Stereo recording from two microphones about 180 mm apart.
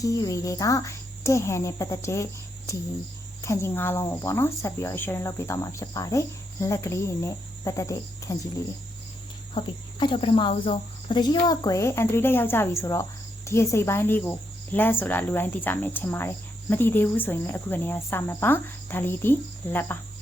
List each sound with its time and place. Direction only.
0.0 s speech: 20° left (ahead or behind)
3.4 s speech: 15° left (ahead or behind)
9.6 s speech: 30° left (ahead or behind); by 20.0 s 10° left (ahead or behind)